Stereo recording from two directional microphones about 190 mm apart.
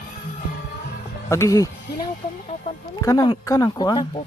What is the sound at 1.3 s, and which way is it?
Speech, 15° left (ahead or behind).